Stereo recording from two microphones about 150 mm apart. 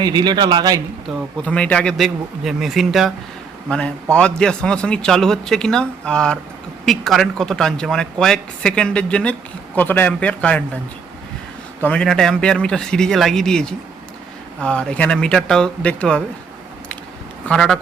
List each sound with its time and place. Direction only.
0.0 s speech: 30° right (ahead or behind)
1.4 s a man's voice: 10° left (ahead or behind)
11.8 s a man's voice: 10° left (ahead or behind)
17.4 s speech: 5° left (ahead or behind)